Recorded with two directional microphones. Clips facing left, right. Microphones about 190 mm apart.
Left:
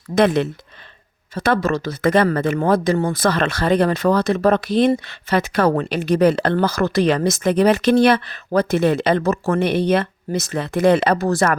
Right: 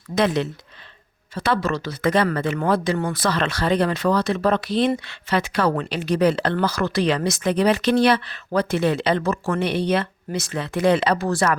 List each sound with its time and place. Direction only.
0.1 s speech: 55° left (ahead or behind)